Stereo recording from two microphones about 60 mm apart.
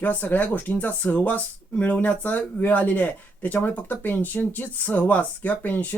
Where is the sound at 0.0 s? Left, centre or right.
Left.